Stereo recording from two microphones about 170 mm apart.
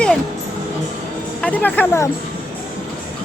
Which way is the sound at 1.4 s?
10° left (ahead or behind).